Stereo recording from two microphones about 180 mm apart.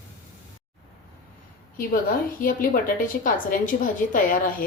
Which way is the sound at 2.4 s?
50° left (ahead or behind).